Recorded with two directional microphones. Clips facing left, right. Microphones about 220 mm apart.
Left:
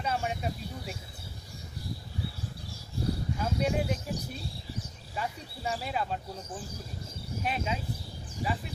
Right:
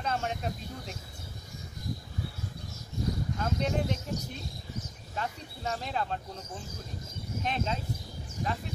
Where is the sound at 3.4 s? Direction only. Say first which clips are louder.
Left 1 dB; 10° left (ahead or behind).